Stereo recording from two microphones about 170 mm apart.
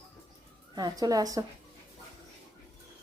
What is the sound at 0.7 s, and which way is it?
Speech, 25° right (ahead or behind).